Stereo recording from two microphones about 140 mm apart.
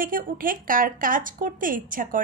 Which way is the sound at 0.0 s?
85° right.